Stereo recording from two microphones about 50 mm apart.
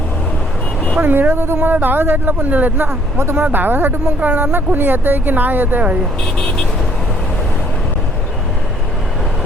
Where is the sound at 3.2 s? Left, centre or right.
Right.